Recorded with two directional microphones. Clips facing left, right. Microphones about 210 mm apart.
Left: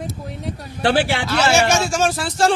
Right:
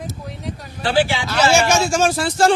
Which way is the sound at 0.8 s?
65° left (ahead or behind).